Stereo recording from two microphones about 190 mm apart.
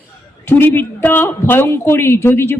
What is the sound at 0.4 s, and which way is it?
Speech, 10° left (ahead or behind).